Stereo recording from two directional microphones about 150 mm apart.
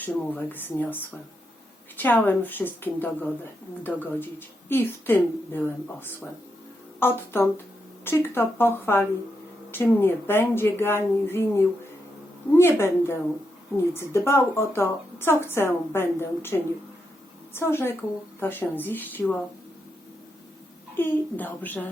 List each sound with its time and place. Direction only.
0.0 s a woman's voice: 10° left (ahead or behind)
20.9 s a woman's voice: 10° left (ahead or behind)